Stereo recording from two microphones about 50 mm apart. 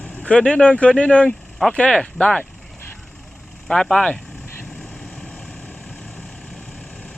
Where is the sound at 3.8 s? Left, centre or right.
Centre.